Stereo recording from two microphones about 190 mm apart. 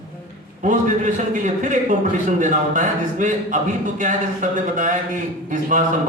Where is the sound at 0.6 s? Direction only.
40° right (ahead or behind).